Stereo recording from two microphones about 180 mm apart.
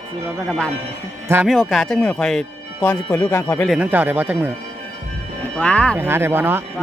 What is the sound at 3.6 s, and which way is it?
Speech, 5° right (ahead or behind).